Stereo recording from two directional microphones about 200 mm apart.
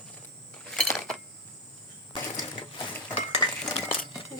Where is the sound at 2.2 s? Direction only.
20° left (ahead or behind).